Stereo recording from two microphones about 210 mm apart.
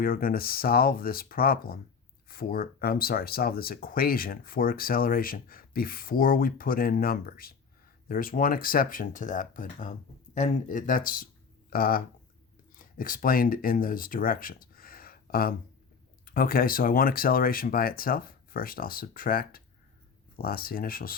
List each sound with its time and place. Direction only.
0.0 s speech: 45° left (ahead or behind)